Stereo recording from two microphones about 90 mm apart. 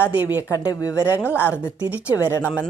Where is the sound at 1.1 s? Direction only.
25° left (ahead or behind).